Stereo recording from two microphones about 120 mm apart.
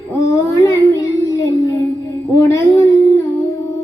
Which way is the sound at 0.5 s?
25° left (ahead or behind).